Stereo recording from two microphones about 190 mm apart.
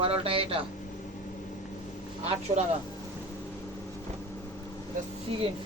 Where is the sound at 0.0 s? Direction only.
30° right (ahead or behind).